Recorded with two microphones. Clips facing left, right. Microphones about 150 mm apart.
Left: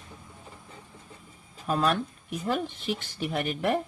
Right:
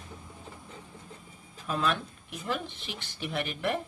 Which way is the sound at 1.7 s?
40° left (ahead or behind).